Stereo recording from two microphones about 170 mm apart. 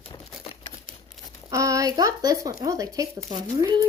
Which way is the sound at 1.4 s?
20° right (ahead or behind).